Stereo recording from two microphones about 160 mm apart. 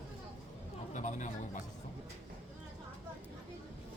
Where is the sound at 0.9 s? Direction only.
50° left (ahead or behind).